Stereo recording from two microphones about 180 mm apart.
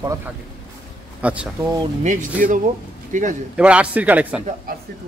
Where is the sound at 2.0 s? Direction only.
45° right (ahead or behind).